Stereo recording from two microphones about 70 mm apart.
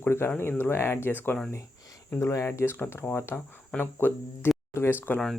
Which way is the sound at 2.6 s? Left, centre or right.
Left.